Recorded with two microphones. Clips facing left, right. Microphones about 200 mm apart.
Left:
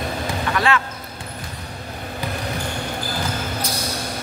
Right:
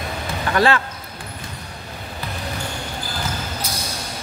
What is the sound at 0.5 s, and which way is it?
Speech, 35° right (ahead or behind).